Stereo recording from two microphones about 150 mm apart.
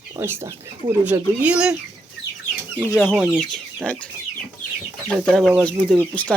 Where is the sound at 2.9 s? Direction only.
10° left (ahead or behind).